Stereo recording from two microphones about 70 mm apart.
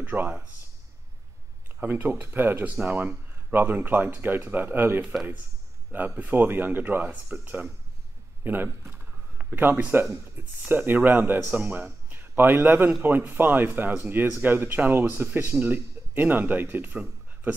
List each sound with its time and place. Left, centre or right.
0.0 s speech: right
1.8 s speech: right
10.6 s speech: right